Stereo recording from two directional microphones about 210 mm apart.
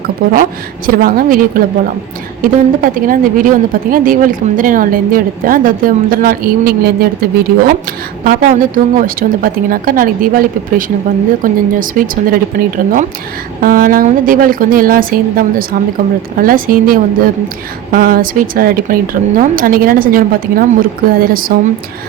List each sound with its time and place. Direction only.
0.2 s a woman's voice: 45° right (ahead or behind)